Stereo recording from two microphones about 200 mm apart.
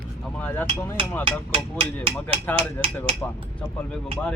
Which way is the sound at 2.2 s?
5° left (ahead or behind).